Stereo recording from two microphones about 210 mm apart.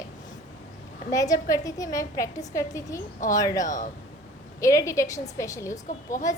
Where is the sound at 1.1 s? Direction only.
15° left (ahead or behind).